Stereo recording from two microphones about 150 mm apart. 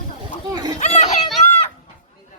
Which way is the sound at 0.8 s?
50° left (ahead or behind).